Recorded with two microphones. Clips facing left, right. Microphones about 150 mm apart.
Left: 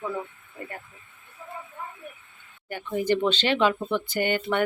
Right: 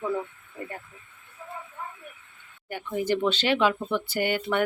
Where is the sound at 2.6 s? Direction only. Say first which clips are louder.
Left 2 dB; 10° right (ahead or behind).